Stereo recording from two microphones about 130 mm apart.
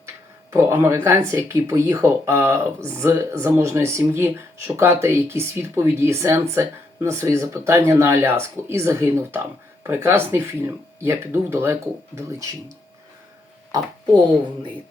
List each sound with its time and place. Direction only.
0.5 s speech: 20° right (ahead or behind)